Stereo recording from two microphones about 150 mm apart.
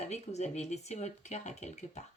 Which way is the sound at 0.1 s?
45° left (ahead or behind).